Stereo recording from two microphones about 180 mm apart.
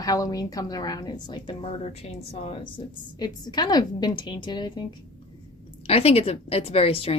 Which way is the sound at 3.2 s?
25° left (ahead or behind).